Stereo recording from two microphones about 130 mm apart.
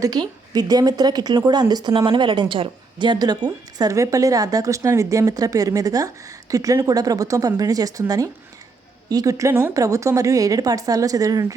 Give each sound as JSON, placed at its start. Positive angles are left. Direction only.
{"t": 0.0, "sound": "a woman's voice", "side_deg": -30}